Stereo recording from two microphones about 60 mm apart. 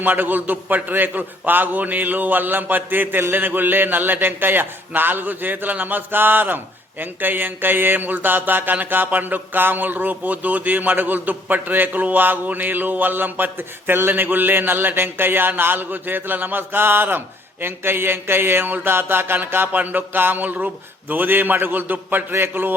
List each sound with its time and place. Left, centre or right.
0.0 s mantra: right